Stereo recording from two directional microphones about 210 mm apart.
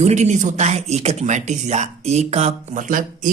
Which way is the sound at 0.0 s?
35° right (ahead or behind).